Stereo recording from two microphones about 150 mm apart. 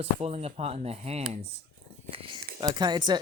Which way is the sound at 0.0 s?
45° right (ahead or behind).